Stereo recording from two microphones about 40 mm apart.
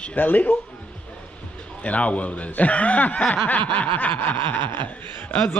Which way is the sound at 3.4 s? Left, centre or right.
Left.